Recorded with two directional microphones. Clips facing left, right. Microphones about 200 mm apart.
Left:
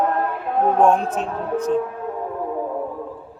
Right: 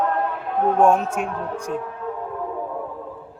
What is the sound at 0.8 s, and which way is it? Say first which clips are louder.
Speech: right 1 dB; 10° right (ahead or behind).